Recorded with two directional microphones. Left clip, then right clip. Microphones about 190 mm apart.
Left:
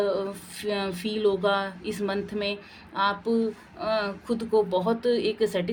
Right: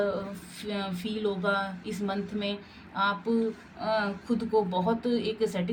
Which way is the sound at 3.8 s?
45° left (ahead or behind).